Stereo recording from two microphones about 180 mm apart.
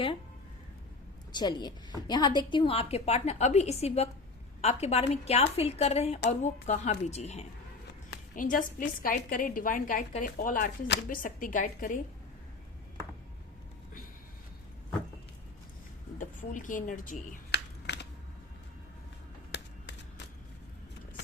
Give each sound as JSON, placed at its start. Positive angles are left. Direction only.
{"t": 1.3, "sound": "a woman's voice", "side_deg": 25}
{"t": 8.4, "sound": "a woman's voice", "side_deg": 50}
{"t": 10.8, "sound": "speech", "side_deg": 70}
{"t": 11.2, "sound": "a woman's voice", "side_deg": 50}
{"t": 16.1, "sound": "a woman's voice", "side_deg": 45}
{"t": 17.5, "sound": "a sound", "side_deg": 70}
{"t": 19.5, "sound": "a sound", "side_deg": 75}